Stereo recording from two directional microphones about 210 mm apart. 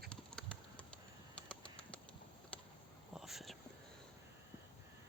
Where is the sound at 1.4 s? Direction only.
5° left (ahead or behind).